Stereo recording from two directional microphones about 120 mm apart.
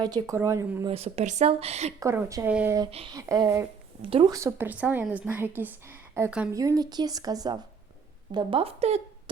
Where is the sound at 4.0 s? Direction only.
50° right (ahead or behind).